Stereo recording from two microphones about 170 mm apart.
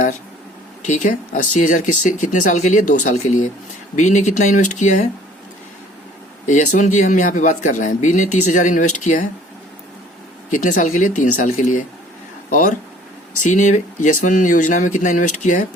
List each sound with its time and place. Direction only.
0.9 s speech: 45° left (ahead or behind)
6.4 s speech: 45° left (ahead or behind)
10.5 s speech: 45° left (ahead or behind)